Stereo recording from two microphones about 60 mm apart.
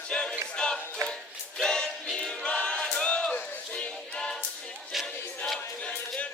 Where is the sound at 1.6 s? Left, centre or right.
Centre.